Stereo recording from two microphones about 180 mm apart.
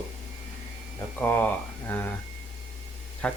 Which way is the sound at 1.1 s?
10° left (ahead or behind).